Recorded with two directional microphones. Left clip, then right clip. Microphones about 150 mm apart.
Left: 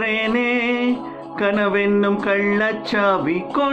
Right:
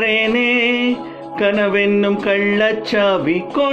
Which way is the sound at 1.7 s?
45° right (ahead or behind).